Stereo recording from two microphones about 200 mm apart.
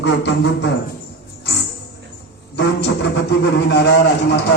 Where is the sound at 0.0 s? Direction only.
60° left (ahead or behind).